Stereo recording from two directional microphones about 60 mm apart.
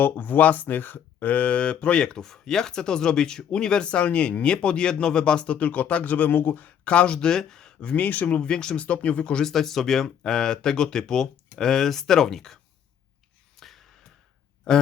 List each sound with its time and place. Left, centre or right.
0.0 s speech: left
6.7 s speech: left
7.9 s speech: left
8.4 s speech: centre
9.4 s speech: centre
13.6 s gasp: centre